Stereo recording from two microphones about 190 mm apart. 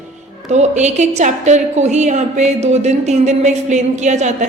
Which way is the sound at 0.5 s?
35° right (ahead or behind).